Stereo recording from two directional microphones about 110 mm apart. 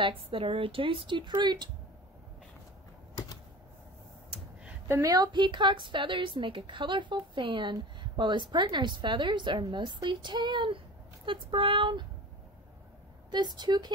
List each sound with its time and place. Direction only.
0.0 s a woman's voice: 50° right (ahead or behind)
4.8 s a woman's voice: 25° right (ahead or behind)
5.1 s a woman's voice: 40° right (ahead or behind)
13.3 s speech: 40° right (ahead or behind)